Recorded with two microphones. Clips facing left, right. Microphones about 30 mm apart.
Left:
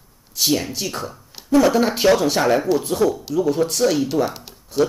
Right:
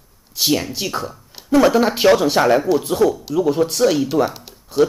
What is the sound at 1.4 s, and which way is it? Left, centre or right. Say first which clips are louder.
Speech: right 2 dB; centre.